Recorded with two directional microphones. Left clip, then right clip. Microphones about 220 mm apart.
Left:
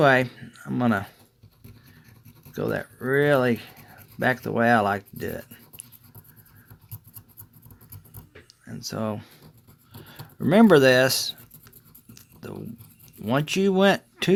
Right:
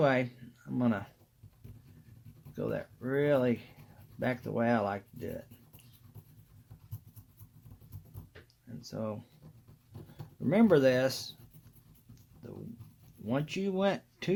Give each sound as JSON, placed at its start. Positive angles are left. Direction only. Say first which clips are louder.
{"t": 0.0, "sound": "speech", "louder": "left 10 dB", "side_deg": 55}
{"t": 2.5, "sound": "speech", "louder": "left 8 dB", "side_deg": 55}
{"t": 8.4, "sound": "a sound", "louder": "left 14 dB", "side_deg": 55}
{"t": 10.4, "sound": "speech", "louder": "left 9 dB", "side_deg": 55}
{"t": 12.1, "sound": "a sound", "louder": "left 10 dB", "side_deg": 55}
{"t": 13.2, "sound": "speech", "louder": "left 11 dB", "side_deg": 55}